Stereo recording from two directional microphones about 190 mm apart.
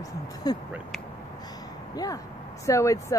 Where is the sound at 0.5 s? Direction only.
20° left (ahead or behind).